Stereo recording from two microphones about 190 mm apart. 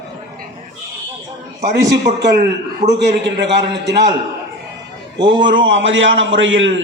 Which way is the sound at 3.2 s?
65° right (ahead or behind).